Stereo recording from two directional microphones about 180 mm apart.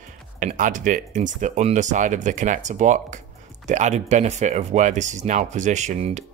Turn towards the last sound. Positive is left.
turn(degrees=-40)  # may be behind; listen again after turning